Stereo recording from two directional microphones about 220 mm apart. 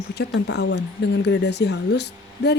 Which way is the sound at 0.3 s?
50° left (ahead or behind).